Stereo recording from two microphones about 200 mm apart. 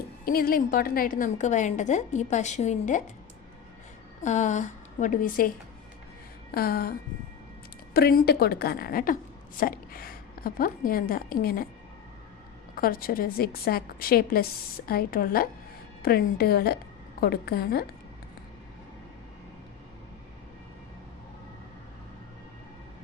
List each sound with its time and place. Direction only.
0.3 s a woman's voice: 45° left (ahead or behind)
4.2 s a woman's voice: 35° left (ahead or behind)
6.5 s a woman's voice: 50° left (ahead or behind)
7.9 s a woman's voice: 50° left (ahead or behind)
12.7 s a woman's voice: 45° left (ahead or behind)